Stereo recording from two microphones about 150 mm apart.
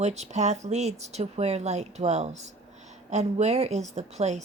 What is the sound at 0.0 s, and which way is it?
Speech, 50° right (ahead or behind).